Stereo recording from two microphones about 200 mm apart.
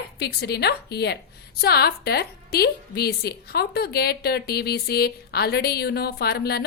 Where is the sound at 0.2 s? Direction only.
55° left (ahead or behind).